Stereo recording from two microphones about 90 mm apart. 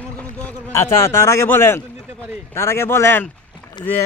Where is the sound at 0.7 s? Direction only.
35° left (ahead or behind).